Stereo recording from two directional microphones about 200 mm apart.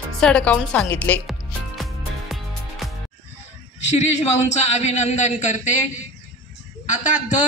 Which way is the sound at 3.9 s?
35° left (ahead or behind).